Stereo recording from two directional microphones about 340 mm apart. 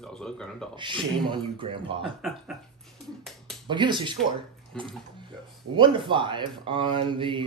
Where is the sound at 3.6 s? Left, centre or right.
Centre.